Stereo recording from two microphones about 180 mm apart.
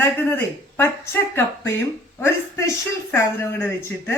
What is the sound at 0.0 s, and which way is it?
Speech, 10° left (ahead or behind).